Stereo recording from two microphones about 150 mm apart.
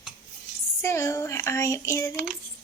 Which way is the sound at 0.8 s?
20° left (ahead or behind).